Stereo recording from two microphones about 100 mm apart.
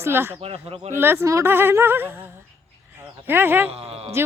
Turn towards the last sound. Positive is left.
turn(degrees=-80)